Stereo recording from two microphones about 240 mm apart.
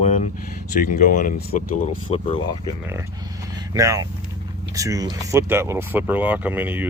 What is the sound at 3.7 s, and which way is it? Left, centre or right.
Speech, centre.